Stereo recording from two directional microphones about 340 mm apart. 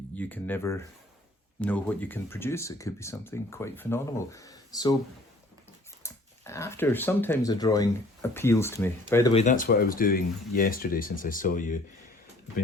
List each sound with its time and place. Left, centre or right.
0.2 s speech: centre
6.0 s speech: centre
9.3 s speech: left